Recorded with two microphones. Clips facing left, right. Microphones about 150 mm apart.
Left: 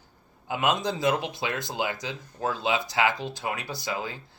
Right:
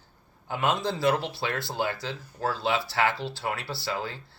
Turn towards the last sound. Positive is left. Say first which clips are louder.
# even
turn(degrees=15)  # may be behind; listen again after turning